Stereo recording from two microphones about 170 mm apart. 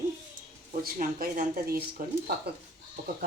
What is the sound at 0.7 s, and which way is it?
Speech, 55° right (ahead or behind).